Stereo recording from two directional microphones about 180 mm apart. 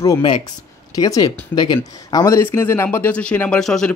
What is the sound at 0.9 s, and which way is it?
Speech, 20° left (ahead or behind).